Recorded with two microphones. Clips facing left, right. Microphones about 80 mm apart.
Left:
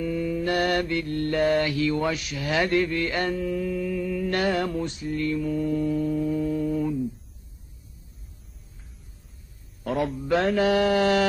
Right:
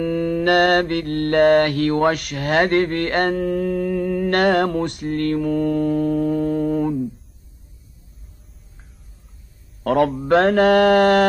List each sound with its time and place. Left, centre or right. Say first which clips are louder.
0.0 s mantra: right 7 dB; right
9.8 s speech: right 9 dB; right
10.2 s mantra: right 6 dB; right